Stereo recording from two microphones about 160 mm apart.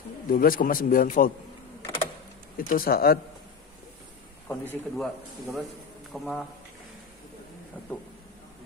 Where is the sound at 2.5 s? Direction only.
65° left (ahead or behind).